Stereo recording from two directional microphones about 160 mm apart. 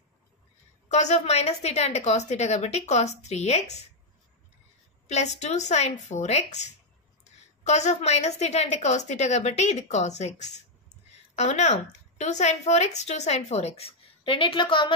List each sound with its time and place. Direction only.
0.8 s a woman's voice: 45° left (ahead or behind)
5.0 s a woman's voice: 45° left (ahead or behind)